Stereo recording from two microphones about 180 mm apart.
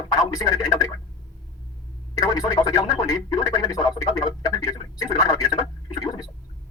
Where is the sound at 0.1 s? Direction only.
20° left (ahead or behind).